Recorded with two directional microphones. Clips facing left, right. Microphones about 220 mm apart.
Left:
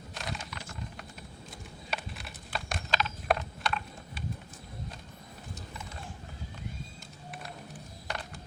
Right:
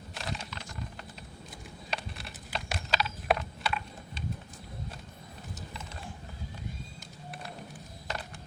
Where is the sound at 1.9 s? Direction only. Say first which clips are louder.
Even; centre (ahead or behind).